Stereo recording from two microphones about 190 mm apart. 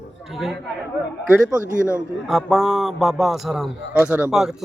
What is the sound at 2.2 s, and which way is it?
A man's voice, centre (ahead or behind).